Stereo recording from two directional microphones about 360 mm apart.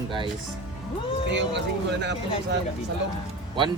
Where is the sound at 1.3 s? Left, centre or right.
Right.